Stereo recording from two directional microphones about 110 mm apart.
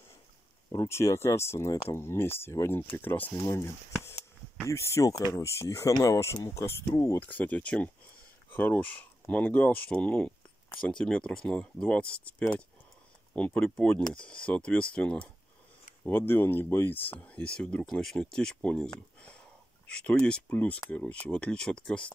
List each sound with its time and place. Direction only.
0.7 s speech: 30° left (ahead or behind)
3.3 s speech: 30° left (ahead or behind)
7.2 s speech: 15° left (ahead or behind)
16.1 s speech: 20° left (ahead or behind)
20.0 s speech: 10° left (ahead or behind)